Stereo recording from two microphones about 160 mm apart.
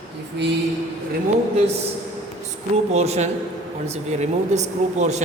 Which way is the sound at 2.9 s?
45° right (ahead or behind).